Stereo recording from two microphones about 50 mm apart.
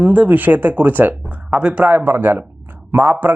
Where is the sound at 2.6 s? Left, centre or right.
Right.